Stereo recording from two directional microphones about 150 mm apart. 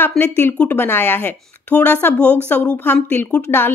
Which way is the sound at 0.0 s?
15° left (ahead or behind).